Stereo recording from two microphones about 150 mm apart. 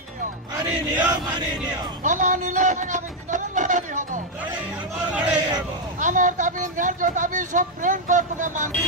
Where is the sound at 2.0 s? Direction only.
55° right (ahead or behind).